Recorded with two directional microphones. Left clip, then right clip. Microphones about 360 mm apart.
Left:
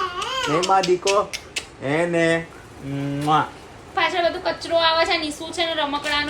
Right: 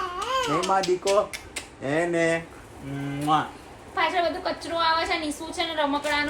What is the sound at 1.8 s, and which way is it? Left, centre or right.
Speech, centre.